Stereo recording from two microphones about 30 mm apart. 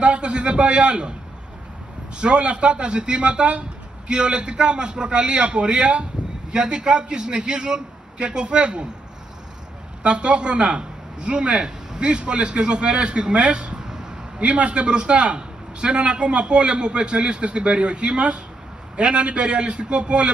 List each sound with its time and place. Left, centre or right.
0.0 s a man's voice: right
2.1 s a man's voice: right
10.0 s a man's voice: right
13.8 s a sound: right
14.4 s a man's voice: right